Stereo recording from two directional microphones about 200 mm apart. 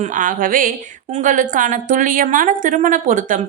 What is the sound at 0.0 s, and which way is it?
A woman's voice, 40° right (ahead or behind).